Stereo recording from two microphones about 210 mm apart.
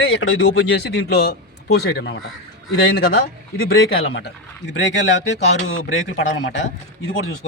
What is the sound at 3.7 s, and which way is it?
A man's voice, 55° left (ahead or behind).